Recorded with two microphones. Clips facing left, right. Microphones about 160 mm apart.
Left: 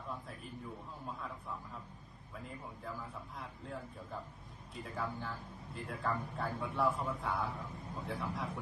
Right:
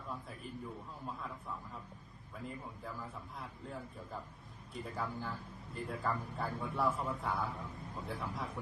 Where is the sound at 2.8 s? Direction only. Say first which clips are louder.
Even; centre (ahead or behind).